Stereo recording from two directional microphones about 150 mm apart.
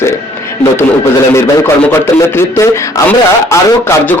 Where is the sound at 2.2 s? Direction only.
20° left (ahead or behind).